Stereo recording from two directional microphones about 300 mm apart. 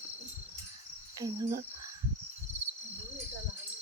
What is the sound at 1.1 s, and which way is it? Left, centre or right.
Speech, centre.